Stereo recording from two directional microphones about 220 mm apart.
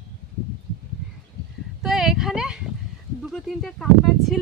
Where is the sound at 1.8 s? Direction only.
Centre (ahead or behind).